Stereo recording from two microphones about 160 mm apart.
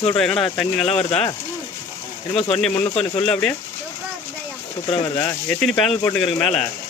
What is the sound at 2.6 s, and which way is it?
Speech, 5° left (ahead or behind).